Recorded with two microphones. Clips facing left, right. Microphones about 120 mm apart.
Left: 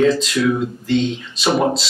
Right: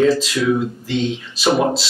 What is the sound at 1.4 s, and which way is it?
Speech, centre (ahead or behind).